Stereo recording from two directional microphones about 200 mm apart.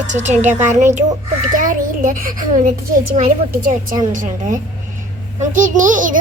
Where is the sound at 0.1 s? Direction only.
35° right (ahead or behind).